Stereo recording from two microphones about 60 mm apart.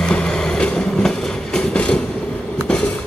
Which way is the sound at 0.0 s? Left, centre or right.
Centre.